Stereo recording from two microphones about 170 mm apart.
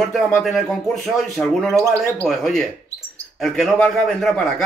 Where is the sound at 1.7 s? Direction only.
15° right (ahead or behind).